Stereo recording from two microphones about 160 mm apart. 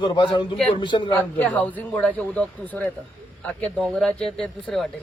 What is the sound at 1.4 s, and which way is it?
A man's voice, 10° left (ahead or behind).